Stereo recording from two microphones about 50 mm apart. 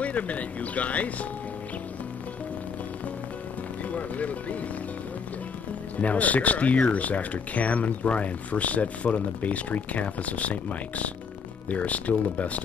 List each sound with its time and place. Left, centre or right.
0.0 s speech: left
3.9 s speech: left
5.9 s speech: left